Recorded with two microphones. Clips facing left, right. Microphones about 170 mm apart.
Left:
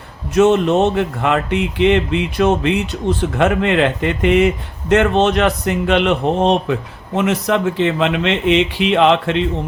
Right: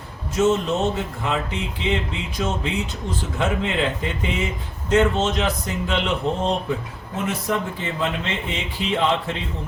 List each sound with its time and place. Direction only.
0.3 s speech: 70° left (ahead or behind)
7.2 s speech: 85° left